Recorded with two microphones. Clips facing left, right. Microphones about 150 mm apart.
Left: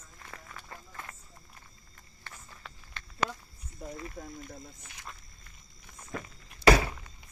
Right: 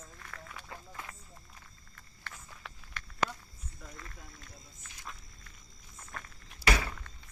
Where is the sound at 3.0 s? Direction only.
25° left (ahead or behind).